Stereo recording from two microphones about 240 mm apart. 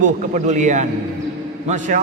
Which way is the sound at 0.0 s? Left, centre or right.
Right.